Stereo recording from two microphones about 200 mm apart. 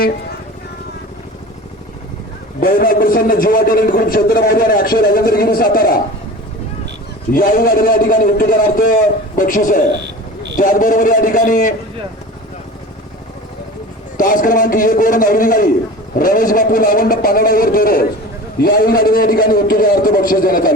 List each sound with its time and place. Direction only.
2.6 s a man's voice: 45° left (ahead or behind)
7.3 s a man's voice: 45° left (ahead or behind)
14.2 s a man's voice: 40° left (ahead or behind)